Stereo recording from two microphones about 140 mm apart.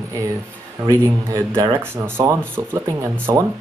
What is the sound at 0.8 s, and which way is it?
A man's voice, 25° right (ahead or behind).